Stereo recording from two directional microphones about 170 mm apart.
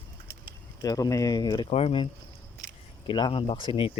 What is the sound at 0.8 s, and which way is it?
Speech, 20° left (ahead or behind).